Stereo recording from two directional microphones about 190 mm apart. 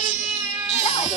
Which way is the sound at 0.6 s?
35° left (ahead or behind).